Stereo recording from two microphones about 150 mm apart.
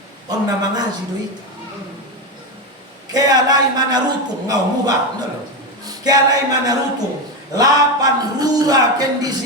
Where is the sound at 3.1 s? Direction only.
25° right (ahead or behind).